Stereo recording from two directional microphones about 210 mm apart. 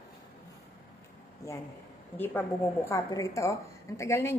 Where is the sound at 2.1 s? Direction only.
10° left (ahead or behind).